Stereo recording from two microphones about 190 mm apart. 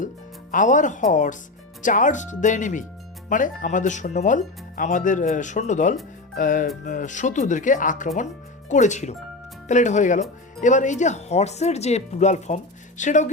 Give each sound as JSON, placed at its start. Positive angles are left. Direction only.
{"t": 0.5, "sound": "speech", "side_deg": 40}
{"t": 6.3, "sound": "music", "side_deg": 45}
{"t": 6.8, "sound": "speech", "side_deg": 40}